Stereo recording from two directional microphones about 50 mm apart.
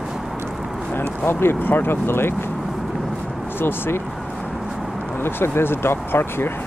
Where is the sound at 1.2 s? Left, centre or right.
Left.